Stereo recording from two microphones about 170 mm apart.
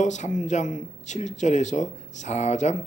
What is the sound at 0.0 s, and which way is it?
A man's voice, 45° left (ahead or behind).